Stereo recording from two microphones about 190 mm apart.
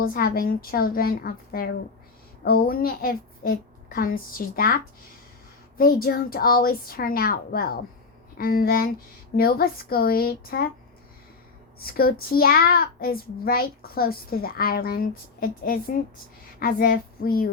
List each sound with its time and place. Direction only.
0.0 s a child's voice: 50° left (ahead or behind)
11.8 s a child's voice: 55° left (ahead or behind)